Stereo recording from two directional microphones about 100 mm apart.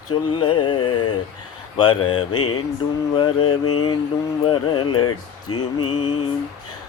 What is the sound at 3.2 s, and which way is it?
Speech, 55° left (ahead or behind).